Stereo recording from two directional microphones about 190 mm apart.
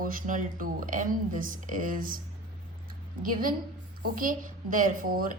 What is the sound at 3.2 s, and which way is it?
A woman's voice, 45° right (ahead or behind).